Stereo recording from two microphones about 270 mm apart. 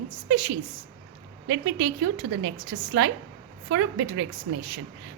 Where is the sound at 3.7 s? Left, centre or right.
Right.